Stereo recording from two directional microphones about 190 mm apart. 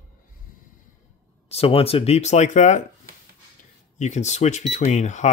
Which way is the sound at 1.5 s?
30° left (ahead or behind).